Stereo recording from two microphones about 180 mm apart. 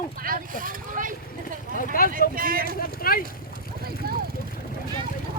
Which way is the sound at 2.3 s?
50° right (ahead or behind).